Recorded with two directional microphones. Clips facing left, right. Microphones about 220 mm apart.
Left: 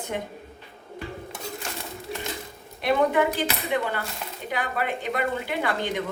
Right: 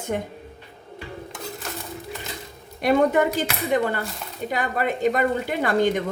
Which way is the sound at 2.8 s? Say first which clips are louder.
Right 3 dB; 45° right (ahead or behind).